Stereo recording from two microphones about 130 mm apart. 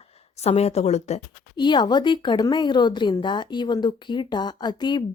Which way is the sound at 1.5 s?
35° left (ahead or behind).